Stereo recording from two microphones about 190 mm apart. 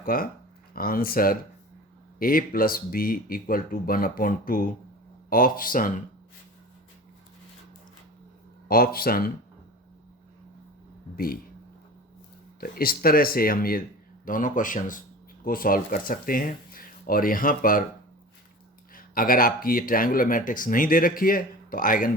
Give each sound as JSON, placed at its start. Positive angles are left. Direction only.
{"t": 0.0, "sound": "speech", "side_deg": 50}
{"t": 8.6, "sound": "speech", "side_deg": 50}
{"t": 12.5, "sound": "speech", "side_deg": 50}
{"t": 18.9, "sound": "speech", "side_deg": 50}